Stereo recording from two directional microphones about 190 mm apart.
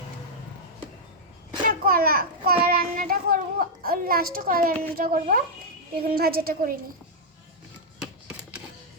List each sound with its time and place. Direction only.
1.8 s a child's voice: 50° right (ahead or behind)